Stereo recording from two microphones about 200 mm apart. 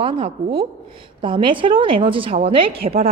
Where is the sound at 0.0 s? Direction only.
25° right (ahead or behind).